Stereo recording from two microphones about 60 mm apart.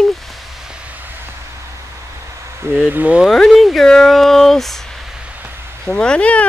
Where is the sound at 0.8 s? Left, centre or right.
Right.